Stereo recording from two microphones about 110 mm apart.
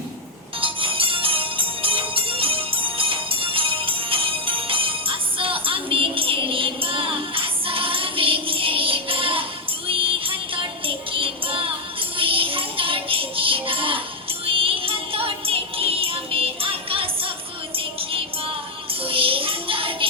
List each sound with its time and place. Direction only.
0.6 s music: 55° right (ahead or behind)